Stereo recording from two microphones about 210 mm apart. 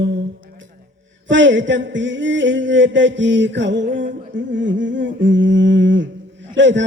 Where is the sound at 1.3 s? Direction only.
60° right (ahead or behind).